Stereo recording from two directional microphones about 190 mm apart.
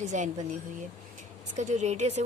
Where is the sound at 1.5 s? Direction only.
40° right (ahead or behind).